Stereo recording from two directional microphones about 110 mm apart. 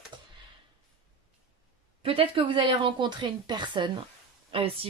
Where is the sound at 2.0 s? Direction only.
55° right (ahead or behind).